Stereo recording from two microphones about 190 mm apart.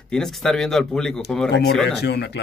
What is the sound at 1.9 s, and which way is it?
Speech, 60° left (ahead or behind).